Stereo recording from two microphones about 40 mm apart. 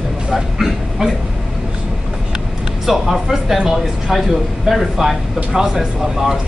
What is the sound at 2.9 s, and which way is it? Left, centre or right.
Speech, centre.